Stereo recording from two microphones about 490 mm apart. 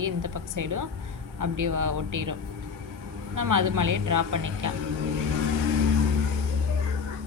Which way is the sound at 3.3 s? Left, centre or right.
Right.